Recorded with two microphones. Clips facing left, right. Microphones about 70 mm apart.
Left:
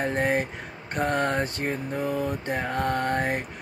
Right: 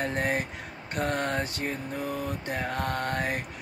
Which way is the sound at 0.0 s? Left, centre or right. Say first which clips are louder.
Left 4 dB; left.